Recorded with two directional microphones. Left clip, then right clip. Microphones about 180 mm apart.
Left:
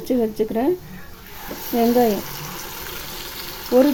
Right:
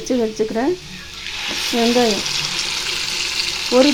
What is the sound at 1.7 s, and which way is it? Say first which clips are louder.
Speech: even; centre (ahead or behind).